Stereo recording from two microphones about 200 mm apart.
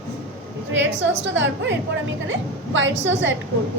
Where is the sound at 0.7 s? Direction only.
65° right (ahead or behind).